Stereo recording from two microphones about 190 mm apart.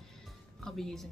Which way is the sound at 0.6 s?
Centre (ahead or behind).